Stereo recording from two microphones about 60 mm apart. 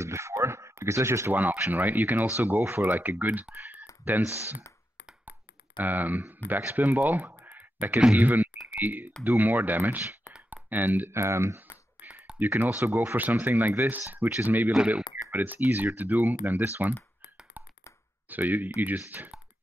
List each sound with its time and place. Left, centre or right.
0.0 s a sound: right
1.3 s speech: right
3.5 s typing: right
4.2 s speech: right
5.8 s speech: right
10.5 s clicking: right
11.1 s speech: right
11.7 s beatboxing: right
12.5 s speech: right
14.8 s speech: centre
15.3 s speech: right
17.6 s a sound: right
18.3 s speech: right